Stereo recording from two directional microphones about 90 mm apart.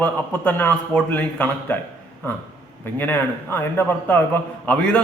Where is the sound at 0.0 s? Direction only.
20° left (ahead or behind).